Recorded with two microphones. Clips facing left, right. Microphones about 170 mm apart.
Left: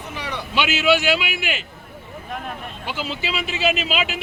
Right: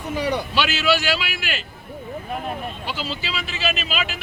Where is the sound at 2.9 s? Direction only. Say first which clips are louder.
Left 5 dB; 20° left (ahead or behind).